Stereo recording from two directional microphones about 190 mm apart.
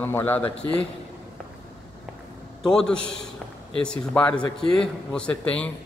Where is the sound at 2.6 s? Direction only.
5° left (ahead or behind).